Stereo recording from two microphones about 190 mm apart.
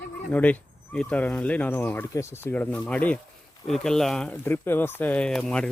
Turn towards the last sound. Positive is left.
turn(degrees=5)  # may be behind; listen again after turning